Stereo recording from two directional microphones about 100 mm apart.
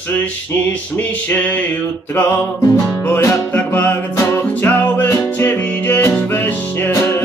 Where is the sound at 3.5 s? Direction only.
20° left (ahead or behind).